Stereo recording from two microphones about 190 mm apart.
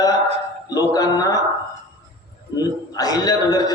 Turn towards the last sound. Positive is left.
turn(degrees=20)  # may be behind; listen again after turning